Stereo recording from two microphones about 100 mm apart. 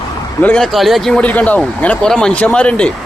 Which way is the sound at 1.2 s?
15° left (ahead or behind).